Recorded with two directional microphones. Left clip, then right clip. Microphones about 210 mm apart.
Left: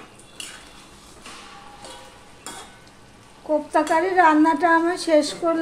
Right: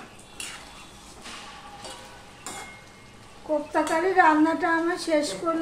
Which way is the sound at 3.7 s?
45° left (ahead or behind).